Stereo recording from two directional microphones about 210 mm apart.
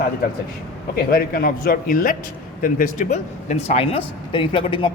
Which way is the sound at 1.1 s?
45° left (ahead or behind).